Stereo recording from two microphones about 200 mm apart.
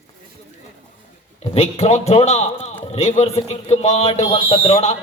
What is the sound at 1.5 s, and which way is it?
A man's voice, 30° left (ahead or behind).